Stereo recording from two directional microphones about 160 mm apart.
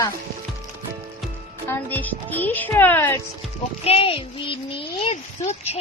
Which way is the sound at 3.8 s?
35° left (ahead or behind).